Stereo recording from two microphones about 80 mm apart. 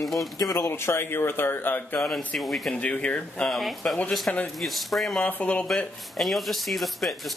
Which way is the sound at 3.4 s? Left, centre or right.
Centre.